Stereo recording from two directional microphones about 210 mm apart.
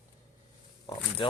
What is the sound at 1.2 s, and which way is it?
Speech, 25° left (ahead or behind).